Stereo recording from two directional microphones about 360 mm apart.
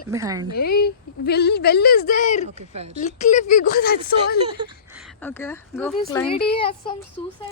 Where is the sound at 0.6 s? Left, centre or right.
Left.